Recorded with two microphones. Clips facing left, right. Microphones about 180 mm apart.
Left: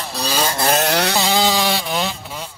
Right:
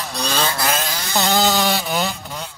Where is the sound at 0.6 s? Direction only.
35° left (ahead or behind).